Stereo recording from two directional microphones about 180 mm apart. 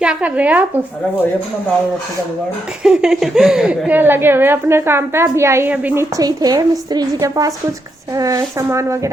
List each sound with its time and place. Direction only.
0.0 s a woman's voice: 5° right (ahead or behind)
2.8 s a woman's voice: 5° right (ahead or behind)